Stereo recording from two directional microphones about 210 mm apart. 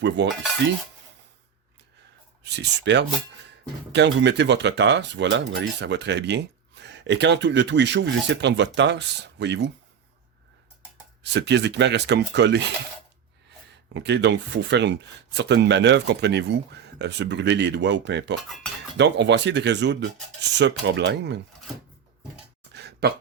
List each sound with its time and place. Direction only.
0.2 s speech: 55° right (ahead or behind)
2.4 s speech: 55° right (ahead or behind)
11.2 s speech: 55° right (ahead or behind)
13.9 s speech: 60° right (ahead or behind)
18.4 s cutlery: centre (ahead or behind)
18.9 s speech: 55° right (ahead or behind)
22.7 s a sound: 50° right (ahead or behind)